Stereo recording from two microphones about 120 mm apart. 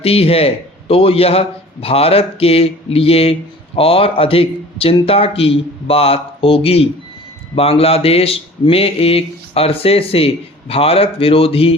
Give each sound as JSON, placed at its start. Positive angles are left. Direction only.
{"t": 0.0, "sound": "speech", "side_deg": 55}